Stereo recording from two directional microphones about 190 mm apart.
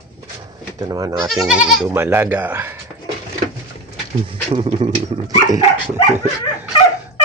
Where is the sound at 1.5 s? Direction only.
5° right (ahead or behind).